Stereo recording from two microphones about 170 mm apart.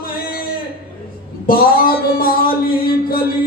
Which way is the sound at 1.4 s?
60° left (ahead or behind).